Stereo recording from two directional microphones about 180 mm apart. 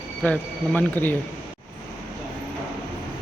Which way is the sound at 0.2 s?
5° left (ahead or behind).